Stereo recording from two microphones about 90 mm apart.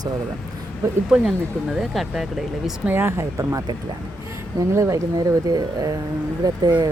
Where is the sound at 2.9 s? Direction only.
25° right (ahead or behind); by 6.9 s 45° right (ahead or behind).